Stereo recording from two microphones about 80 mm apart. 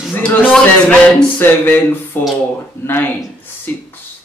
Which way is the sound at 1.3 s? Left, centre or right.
Left.